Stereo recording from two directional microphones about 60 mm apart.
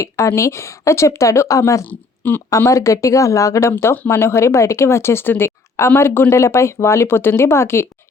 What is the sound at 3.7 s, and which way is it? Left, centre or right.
Speech, left.